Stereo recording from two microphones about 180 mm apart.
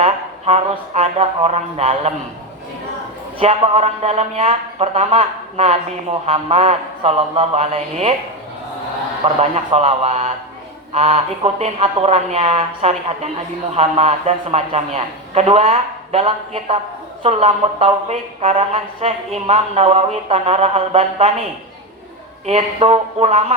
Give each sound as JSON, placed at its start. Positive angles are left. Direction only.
{"t": 0.0, "sound": "a man's voice", "side_deg": -35}
{"t": 3.3, "sound": "a man's voice", "side_deg": -30}
{"t": 9.2, "sound": "a man's voice", "side_deg": -35}
{"t": 22.4, "sound": "a man's voice", "side_deg": -35}